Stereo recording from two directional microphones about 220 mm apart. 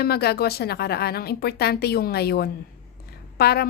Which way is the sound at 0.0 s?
45° left (ahead or behind).